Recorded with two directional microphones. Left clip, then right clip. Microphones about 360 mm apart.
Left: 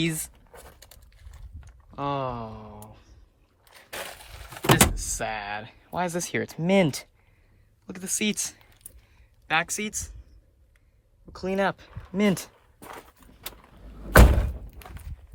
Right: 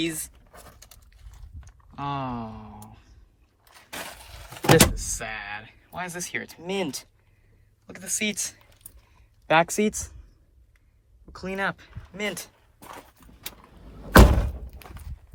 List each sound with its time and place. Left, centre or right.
0.0 s speech: centre
0.5 s a sound: centre
3.6 s speech: centre
7.9 s speech: centre
9.5 s speech: centre
11.3 s speech: centre
12.8 s walk: centre